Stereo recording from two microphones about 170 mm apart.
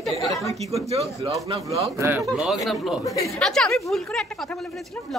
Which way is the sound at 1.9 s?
15° right (ahead or behind).